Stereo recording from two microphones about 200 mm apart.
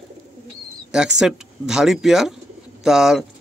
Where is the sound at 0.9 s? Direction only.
5° right (ahead or behind).